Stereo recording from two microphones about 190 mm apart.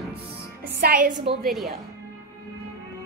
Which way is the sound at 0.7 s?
50° right (ahead or behind).